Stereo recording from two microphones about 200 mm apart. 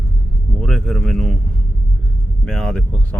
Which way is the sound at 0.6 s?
5° left (ahead or behind).